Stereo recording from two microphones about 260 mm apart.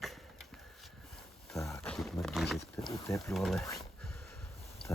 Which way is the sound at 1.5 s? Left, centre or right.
Centre.